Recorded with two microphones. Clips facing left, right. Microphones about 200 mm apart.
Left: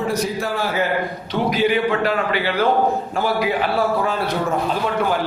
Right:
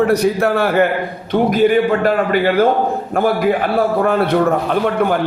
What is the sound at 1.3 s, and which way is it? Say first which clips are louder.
A man's voice: right 6 dB; 50° right (ahead or behind).